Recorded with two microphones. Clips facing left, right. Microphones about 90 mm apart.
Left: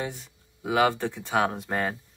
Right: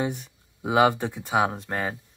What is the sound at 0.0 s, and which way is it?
Speech, 20° right (ahead or behind).